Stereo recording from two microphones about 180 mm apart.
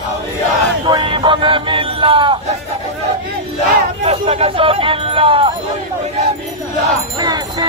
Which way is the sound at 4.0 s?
35° right (ahead or behind).